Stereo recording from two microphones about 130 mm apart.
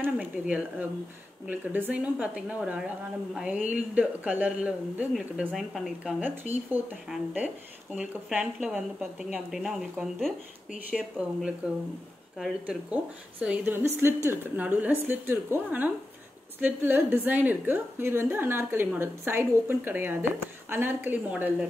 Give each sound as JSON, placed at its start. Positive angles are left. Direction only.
{"t": 0.0, "sound": "a woman's voice", "side_deg": -10}
{"t": 5.5, "sound": "a woman's voice", "side_deg": 0}
{"t": 6.2, "sound": "a woman's voice", "side_deg": -15}